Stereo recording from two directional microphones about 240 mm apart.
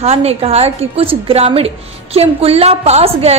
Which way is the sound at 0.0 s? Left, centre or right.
Right.